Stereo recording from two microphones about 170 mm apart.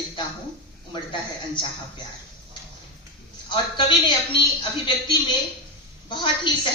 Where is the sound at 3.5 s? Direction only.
25° left (ahead or behind).